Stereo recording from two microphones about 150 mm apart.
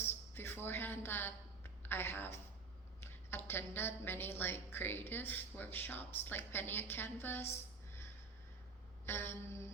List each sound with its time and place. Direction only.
0.0 s a sound: 15° left (ahead or behind)
1.8 s a woman's voice: 15° left (ahead or behind)
9.0 s a woman's voice: 15° left (ahead or behind)